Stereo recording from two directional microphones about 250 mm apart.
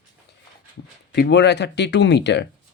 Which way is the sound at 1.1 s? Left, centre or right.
Left.